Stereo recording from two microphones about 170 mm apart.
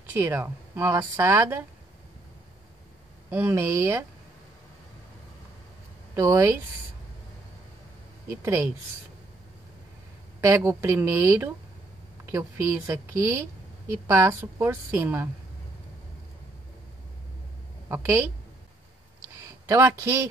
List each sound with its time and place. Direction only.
0.1 s speech: 15° right (ahead or behind)
3.3 s speech: 10° right (ahead or behind)
6.1 s speech: 15° right (ahead or behind)
8.3 s speech: 15° right (ahead or behind)
10.4 s speech: 15° right (ahead or behind)
17.8 s a woman's voice: 15° right (ahead or behind)
19.4 s speech: 15° right (ahead or behind)